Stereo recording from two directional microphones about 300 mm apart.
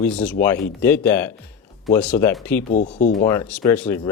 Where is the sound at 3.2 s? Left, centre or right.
Centre.